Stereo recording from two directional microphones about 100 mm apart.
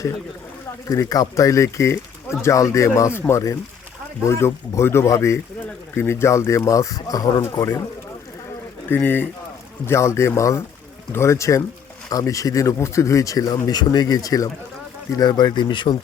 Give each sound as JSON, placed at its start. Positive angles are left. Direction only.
{"t": 0.9, "sound": "speech", "side_deg": 40}
{"t": 8.9, "sound": "speech", "side_deg": 20}